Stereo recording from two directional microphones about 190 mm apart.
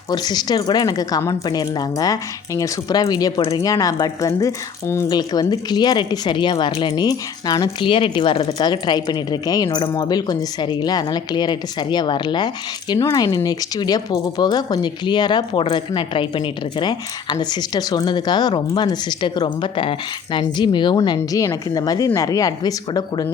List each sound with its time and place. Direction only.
0.1 s a woman's voice: 20° left (ahead or behind)